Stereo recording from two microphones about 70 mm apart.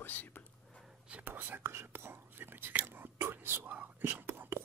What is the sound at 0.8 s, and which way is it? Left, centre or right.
Whispering, centre.